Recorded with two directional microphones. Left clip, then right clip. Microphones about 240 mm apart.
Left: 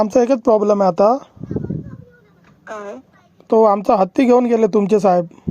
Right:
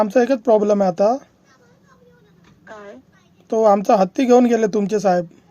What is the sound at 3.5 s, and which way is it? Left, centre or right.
Speech, centre.